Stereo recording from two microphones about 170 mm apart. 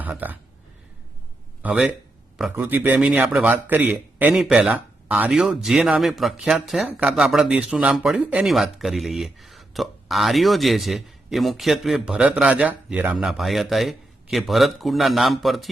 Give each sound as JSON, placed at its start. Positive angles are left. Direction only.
{"t": 0.0, "sound": "speech", "side_deg": -10}
{"t": 1.6, "sound": "a man's voice", "side_deg": -5}